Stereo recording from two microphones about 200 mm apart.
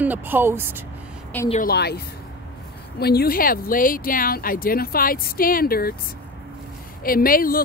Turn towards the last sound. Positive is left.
turn(degrees=45)  # may be behind; listen again after turning